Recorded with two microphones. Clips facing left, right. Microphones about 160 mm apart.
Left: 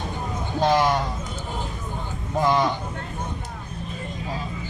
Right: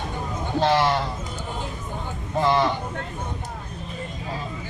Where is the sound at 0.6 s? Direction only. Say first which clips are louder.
Left 1 dB; 10° left (ahead or behind).